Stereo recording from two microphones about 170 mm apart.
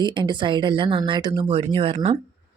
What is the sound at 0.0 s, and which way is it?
Speech, 25° right (ahead or behind).